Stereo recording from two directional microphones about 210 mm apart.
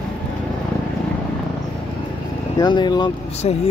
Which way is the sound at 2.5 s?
20° left (ahead or behind).